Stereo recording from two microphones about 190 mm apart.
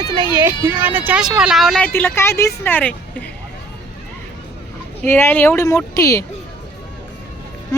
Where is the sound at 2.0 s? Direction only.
10° left (ahead or behind).